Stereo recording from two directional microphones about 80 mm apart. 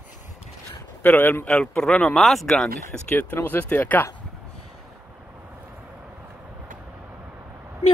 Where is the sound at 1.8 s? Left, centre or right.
Centre.